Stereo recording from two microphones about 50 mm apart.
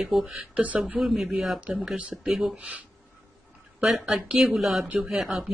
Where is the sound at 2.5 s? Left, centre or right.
Right.